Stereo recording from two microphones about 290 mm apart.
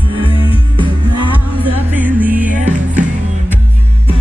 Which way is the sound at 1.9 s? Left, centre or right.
Centre.